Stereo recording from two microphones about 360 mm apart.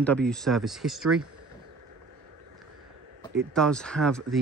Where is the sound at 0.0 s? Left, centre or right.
Centre.